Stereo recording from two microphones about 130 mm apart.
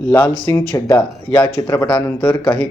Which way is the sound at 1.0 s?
10° left (ahead or behind).